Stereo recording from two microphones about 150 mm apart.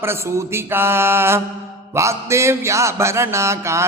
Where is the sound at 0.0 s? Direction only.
15° right (ahead or behind).